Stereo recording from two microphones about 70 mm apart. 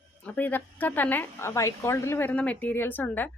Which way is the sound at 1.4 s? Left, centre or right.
Left.